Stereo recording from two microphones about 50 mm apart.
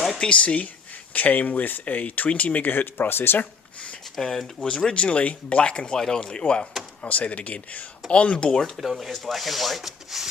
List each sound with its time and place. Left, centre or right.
0.2 s speech: left
4.2 s speech: centre
4.9 s speech: left
8.5 s speech: centre
8.8 s rub: centre